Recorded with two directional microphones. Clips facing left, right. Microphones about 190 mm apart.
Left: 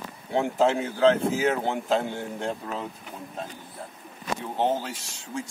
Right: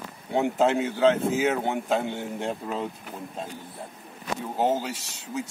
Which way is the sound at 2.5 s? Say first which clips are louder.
Right 2 dB; 15° right (ahead or behind).